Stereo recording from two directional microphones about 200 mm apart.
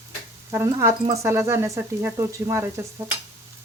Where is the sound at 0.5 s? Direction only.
15° right (ahead or behind).